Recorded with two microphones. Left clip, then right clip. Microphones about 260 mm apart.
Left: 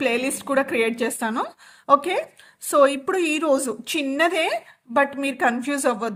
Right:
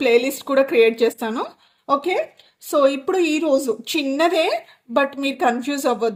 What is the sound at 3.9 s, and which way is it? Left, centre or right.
A woman's voice, left.